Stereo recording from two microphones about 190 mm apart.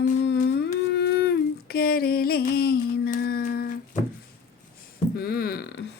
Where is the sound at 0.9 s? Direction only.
60° left (ahead or behind).